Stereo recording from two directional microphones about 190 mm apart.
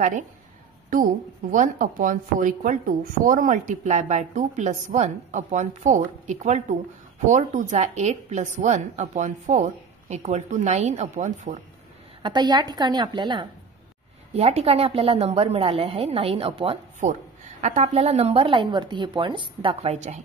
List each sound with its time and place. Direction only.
1.5 s a woman's voice: 45° right (ahead or behind)
12.2 s a woman's voice: 25° right (ahead or behind)